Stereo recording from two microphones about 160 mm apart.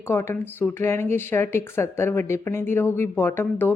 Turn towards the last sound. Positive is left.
turn(degrees=15)  # may be behind; listen again after turning